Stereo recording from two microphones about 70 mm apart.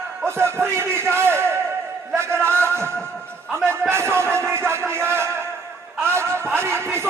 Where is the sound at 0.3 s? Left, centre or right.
Right.